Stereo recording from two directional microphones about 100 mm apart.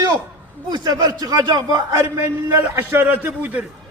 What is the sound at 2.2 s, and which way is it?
A man's voice, 25° right (ahead or behind).